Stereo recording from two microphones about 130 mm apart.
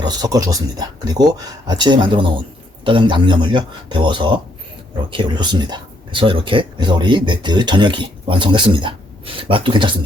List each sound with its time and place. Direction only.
0.0 s speech: 30° right (ahead or behind)